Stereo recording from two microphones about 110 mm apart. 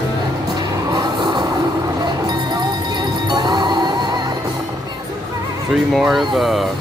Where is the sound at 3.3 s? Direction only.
40° right (ahead or behind).